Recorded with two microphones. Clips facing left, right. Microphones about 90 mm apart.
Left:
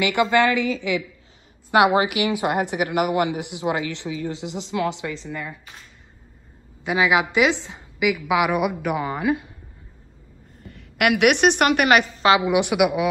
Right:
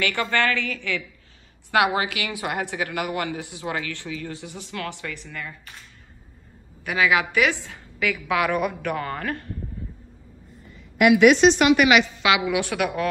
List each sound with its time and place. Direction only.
0.0 s a woman's voice: 15° left (ahead or behind)
6.8 s a woman's voice: 20° left (ahead or behind)
10.6 s a woman's voice: 65° left (ahead or behind); by 12.4 s 35° left (ahead or behind)
12.4 s a woman's voice: 20° left (ahead or behind)